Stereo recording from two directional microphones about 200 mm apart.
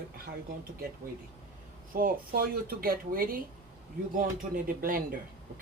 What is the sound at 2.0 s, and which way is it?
Speech, 50° right (ahead or behind).